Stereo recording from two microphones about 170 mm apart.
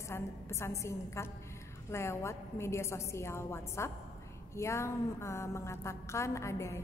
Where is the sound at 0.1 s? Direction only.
15° left (ahead or behind).